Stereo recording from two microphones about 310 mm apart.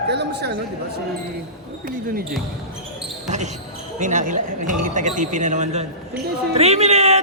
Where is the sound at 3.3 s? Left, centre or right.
Right.